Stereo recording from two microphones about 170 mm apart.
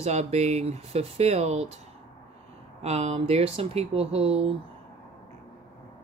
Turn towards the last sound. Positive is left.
turn(degrees=-35)  # may be behind; listen again after turning